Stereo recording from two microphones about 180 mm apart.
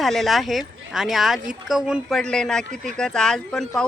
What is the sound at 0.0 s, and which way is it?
Speech, centre (ahead or behind).